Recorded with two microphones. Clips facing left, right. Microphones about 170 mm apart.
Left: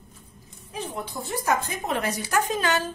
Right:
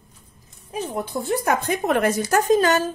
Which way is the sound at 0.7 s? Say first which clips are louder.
Right 6 dB; 45° right (ahead or behind).